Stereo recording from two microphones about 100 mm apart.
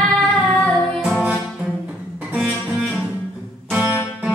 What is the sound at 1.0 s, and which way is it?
Music, 5° right (ahead or behind).